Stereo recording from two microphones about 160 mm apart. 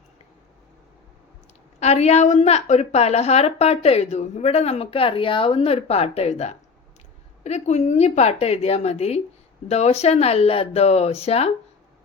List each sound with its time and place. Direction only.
1.8 s a woman's voice: 45° left (ahead or behind)